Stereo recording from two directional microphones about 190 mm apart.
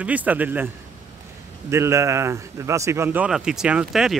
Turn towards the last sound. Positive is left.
turn(degrees=-5)  # may be behind; listen again after turning